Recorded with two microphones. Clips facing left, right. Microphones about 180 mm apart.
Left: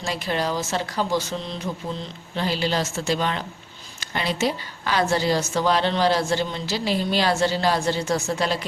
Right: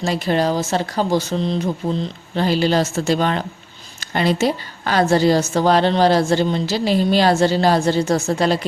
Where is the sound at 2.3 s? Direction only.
50° right (ahead or behind).